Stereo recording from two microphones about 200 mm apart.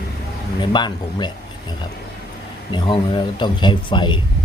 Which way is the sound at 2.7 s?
25° left (ahead or behind).